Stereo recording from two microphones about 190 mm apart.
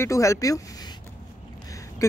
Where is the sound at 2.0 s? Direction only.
15° left (ahead or behind).